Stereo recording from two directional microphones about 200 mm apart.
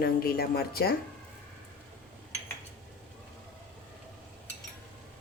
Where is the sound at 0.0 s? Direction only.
50° left (ahead or behind).